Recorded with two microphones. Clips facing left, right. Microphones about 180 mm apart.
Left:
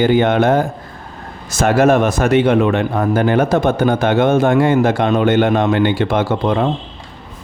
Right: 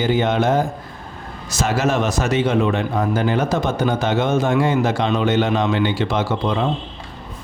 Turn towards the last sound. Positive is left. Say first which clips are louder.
# left 4 dB
turn(degrees=55)  # may be behind; listen again after turning